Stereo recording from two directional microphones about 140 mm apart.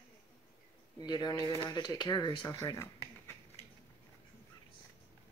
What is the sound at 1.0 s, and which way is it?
Speech, 30° left (ahead or behind).